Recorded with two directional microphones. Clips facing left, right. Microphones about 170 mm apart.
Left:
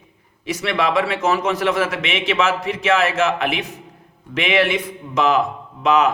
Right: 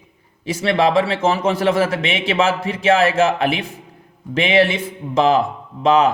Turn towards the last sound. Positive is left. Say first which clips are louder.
# right 2 dB
turn(degrees=-30)  # may be behind; listen again after turning